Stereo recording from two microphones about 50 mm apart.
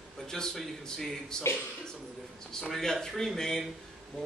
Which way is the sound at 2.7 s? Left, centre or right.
Centre.